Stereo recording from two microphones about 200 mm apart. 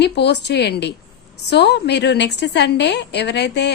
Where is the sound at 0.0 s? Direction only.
55° left (ahead or behind).